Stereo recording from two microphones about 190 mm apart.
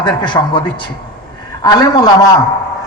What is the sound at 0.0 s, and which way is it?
Speech, 25° left (ahead or behind).